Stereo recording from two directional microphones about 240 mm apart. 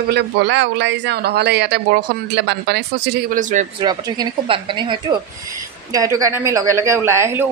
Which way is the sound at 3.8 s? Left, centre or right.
Centre.